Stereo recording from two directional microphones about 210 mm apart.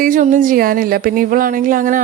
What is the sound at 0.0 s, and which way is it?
Speech, 40° right (ahead or behind).